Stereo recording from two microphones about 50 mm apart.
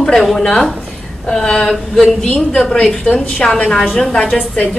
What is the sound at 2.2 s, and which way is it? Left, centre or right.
A woman's voice, left.